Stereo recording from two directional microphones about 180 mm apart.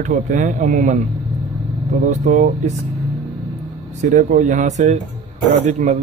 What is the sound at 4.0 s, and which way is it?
Speech, 40° right (ahead or behind).